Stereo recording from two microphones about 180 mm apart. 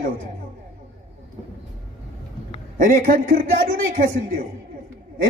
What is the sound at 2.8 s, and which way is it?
A man's voice, 50° right (ahead or behind).